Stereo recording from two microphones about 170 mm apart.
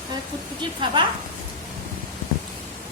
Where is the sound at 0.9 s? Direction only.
25° right (ahead or behind).